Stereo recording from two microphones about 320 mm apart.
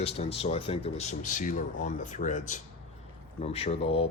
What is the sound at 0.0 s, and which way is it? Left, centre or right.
Speech, centre.